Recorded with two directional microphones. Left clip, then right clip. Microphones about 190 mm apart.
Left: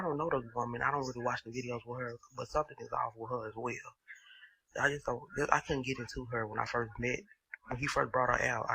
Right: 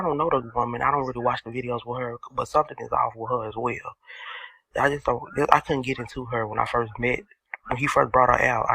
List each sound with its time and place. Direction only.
0.0 s speech: 25° right (ahead or behind)